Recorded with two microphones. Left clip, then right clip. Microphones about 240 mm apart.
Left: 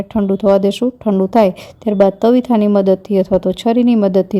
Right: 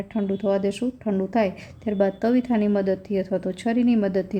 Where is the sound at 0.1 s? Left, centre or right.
Left.